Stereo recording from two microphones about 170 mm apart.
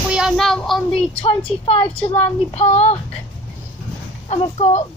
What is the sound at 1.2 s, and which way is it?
Speech, 35° left (ahead or behind).